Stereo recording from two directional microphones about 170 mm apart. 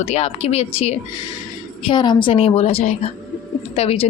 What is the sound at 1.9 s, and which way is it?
A woman's voice, 25° left (ahead or behind).